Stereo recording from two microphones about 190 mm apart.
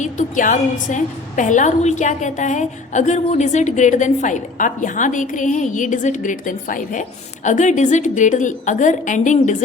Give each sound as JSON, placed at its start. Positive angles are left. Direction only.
{"t": 0.0, "sound": "a woman's voice", "side_deg": 40}